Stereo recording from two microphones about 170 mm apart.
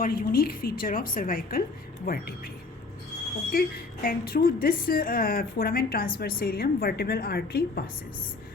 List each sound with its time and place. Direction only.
0.0 s a woman's voice: 60° left (ahead or behind)
3.5 s a woman's voice: 60° left (ahead or behind)